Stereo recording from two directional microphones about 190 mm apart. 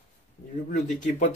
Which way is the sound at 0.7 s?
40° left (ahead or behind).